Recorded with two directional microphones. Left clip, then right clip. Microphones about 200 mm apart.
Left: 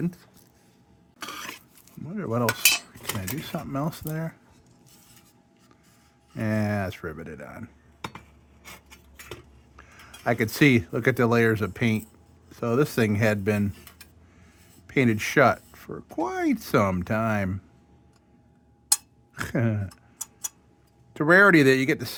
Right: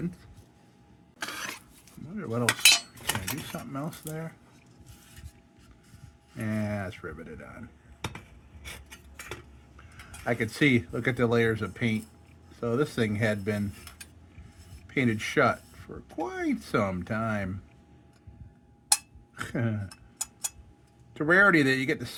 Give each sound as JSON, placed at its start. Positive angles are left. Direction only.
{"t": 1.2, "sound": "cough", "side_deg": -5}
{"t": 2.0, "sound": "cutlery", "side_deg": 45}
{"t": 2.5, "sound": "cutlery", "side_deg": -10}
{"t": 3.5, "sound": "speech", "side_deg": 50}
{"t": 6.3, "sound": "speech", "side_deg": 50}
{"t": 8.6, "sound": "a sound", "side_deg": 5}
{"t": 9.7, "sound": "speech", "side_deg": 50}
{"t": 14.8, "sound": "speech", "side_deg": 50}
{"t": 19.3, "sound": "speech", "side_deg": 50}
{"t": 21.1, "sound": "speech", "side_deg": 50}